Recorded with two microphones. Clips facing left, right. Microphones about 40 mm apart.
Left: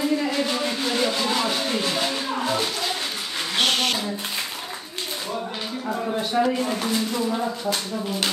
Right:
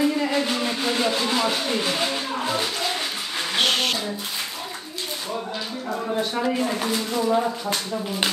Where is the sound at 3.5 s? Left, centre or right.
Centre.